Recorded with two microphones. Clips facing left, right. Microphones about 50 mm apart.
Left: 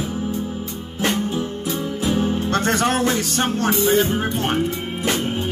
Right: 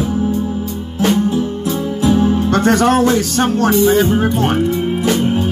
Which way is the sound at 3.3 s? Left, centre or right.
Left.